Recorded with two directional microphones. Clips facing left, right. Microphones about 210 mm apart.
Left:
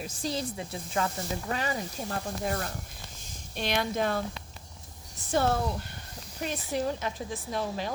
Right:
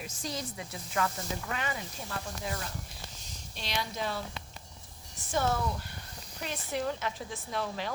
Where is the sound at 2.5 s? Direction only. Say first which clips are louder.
Left 6 dB; 55° left (ahead or behind).